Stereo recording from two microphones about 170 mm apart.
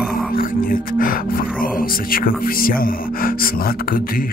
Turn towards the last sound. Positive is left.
turn(degrees=55)  # may be behind; listen again after turning